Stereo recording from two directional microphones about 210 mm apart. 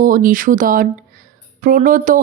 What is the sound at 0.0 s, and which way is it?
Mantra, 40° right (ahead or behind).